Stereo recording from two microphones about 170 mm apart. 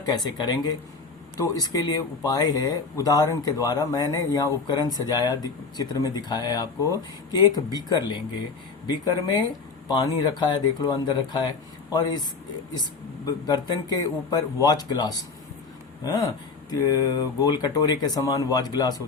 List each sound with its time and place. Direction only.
0.0 s speech: 25° left (ahead or behind)
13.2 s speech: 25° left (ahead or behind)